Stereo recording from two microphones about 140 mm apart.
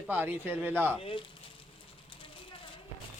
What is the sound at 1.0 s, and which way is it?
Speech, 40° left (ahead or behind).